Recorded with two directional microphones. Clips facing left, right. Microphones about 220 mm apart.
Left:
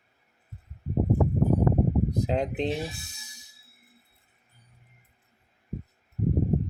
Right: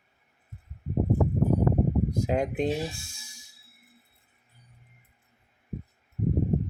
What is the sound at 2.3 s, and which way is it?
Speech, 10° right (ahead or behind).